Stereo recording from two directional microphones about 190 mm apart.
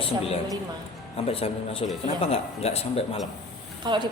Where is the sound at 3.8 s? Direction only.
25° right (ahead or behind).